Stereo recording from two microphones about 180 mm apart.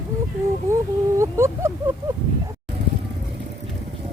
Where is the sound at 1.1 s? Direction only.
15° right (ahead or behind).